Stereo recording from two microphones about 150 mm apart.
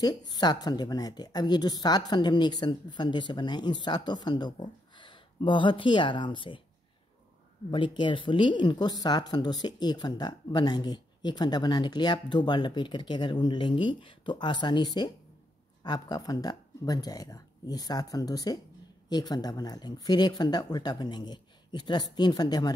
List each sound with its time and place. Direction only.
0.0 s speech: 25° left (ahead or behind)
7.7 s speech: 30° left (ahead or behind)